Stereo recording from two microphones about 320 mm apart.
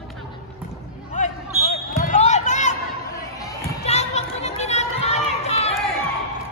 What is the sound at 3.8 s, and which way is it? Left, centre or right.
Crowd, left.